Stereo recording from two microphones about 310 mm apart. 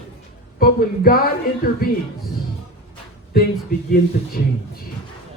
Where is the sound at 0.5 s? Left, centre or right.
Left.